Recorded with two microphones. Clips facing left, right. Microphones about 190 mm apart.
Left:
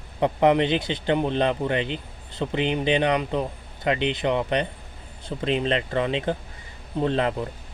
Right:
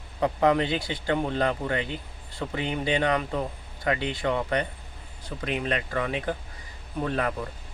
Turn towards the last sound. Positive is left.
turn(degrees=25)  # may be behind; listen again after turning